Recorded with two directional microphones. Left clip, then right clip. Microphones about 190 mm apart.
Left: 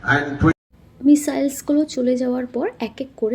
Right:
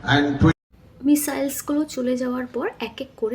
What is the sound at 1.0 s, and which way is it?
Speech, 20° left (ahead or behind).